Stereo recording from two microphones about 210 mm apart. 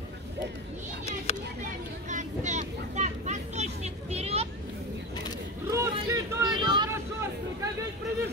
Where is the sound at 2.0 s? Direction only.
35° right (ahead or behind).